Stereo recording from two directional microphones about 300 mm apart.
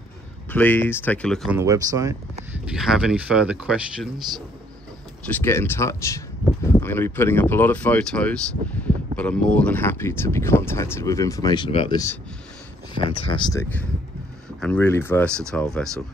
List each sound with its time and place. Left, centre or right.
0.5 s speech: centre
5.3 s speech: centre